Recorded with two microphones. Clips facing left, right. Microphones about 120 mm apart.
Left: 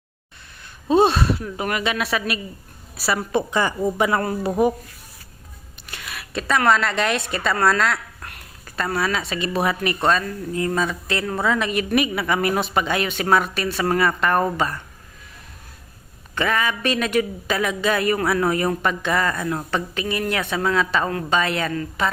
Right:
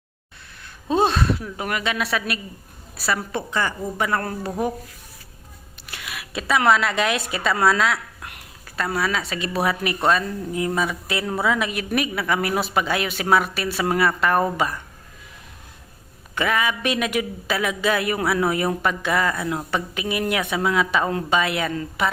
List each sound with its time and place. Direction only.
0.6 s a woman's voice: centre (ahead or behind)
3.3 s speech: 15° left (ahead or behind)
5.8 s a sound: 5° right (ahead or behind)
6.7 s a woman's voice: 5° right (ahead or behind)
8.2 s a sound: 15° right (ahead or behind)
8.6 s a woman's voice: centre (ahead or behind)
16.3 s speech: 5° right (ahead or behind)